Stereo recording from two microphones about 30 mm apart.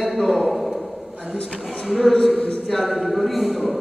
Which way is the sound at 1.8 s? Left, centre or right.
Centre.